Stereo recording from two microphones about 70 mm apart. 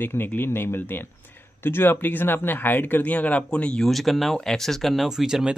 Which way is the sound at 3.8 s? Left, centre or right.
Centre.